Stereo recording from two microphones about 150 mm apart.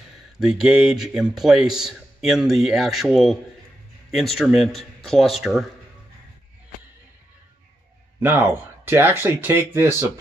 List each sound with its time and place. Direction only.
0.4 s speech: 5° right (ahead or behind)
8.2 s speech: 15° right (ahead or behind)